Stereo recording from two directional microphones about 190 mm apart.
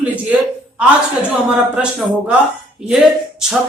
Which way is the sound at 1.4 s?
5° right (ahead or behind).